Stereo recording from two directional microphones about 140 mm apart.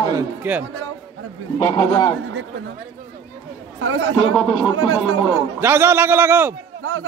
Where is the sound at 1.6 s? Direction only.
30° left (ahead or behind).